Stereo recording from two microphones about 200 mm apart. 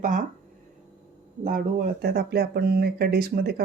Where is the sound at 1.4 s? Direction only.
40° right (ahead or behind).